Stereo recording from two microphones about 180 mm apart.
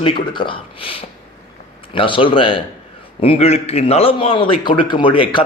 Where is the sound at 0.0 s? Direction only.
30° left (ahead or behind).